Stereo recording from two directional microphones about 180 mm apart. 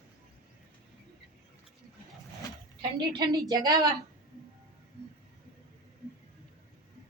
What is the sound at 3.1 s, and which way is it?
Speech, 20° right (ahead or behind).